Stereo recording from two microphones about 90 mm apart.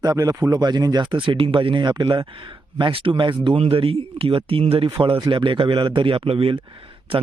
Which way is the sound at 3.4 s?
75° right (ahead or behind).